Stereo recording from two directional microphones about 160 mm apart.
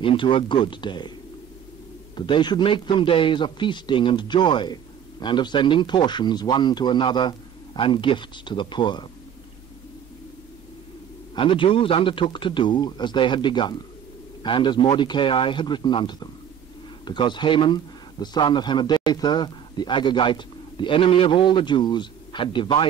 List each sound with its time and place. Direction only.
0.0 s a man's voice: 35° left (ahead or behind)
2.1 s a man's voice: 30° left (ahead or behind)
11.3 s a man's voice: 30° left (ahead or behind)